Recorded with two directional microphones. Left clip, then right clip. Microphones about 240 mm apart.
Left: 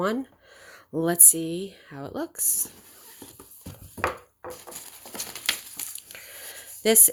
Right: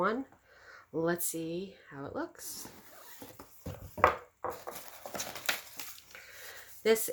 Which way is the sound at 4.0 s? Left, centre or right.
Centre.